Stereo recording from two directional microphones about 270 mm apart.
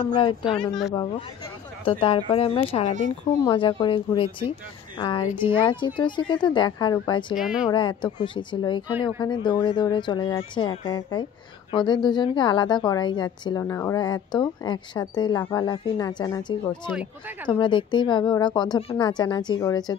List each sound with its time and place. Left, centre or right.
0.0 s a woman's voice: centre
7.3 s speech: centre
7.7 s a woman's voice: centre
16.9 s speech: centre
17.5 s a woman's voice: centre